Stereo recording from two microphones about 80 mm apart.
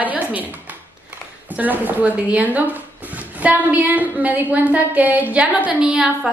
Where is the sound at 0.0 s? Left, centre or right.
Right.